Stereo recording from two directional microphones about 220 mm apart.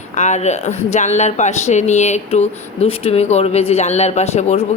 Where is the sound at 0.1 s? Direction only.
30° left (ahead or behind).